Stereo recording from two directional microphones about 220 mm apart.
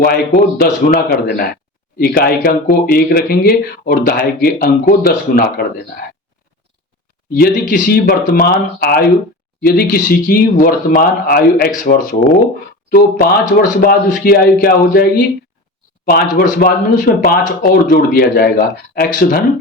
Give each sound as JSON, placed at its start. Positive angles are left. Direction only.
{"t": 0.0, "sound": "speech", "side_deg": 45}
{"t": 7.3, "sound": "speech", "side_deg": 40}
{"t": 16.0, "sound": "speech", "side_deg": 40}